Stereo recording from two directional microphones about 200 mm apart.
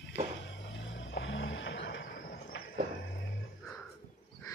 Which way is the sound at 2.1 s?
50° left (ahead or behind).